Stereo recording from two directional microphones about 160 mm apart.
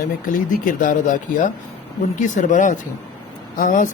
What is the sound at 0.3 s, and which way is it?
Speech, 55° left (ahead or behind).